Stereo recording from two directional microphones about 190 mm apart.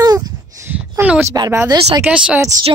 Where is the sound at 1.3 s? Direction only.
15° right (ahead or behind).